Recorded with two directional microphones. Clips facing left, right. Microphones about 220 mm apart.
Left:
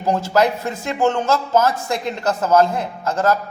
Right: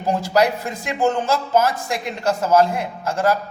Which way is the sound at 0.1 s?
15° right (ahead or behind).